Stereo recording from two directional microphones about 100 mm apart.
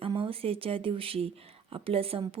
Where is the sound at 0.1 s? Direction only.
65° right (ahead or behind).